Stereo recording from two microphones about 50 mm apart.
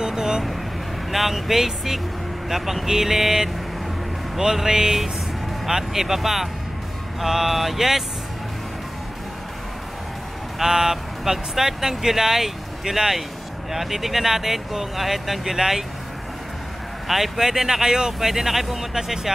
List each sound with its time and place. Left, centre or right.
0.0 s vehicle: centre
1.1 s speech: centre
10.6 s speech: centre
17.1 s speech: centre